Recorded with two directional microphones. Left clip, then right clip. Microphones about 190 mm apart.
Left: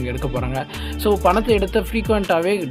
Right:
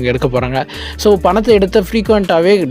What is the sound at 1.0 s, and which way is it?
Speech, 35° right (ahead or behind).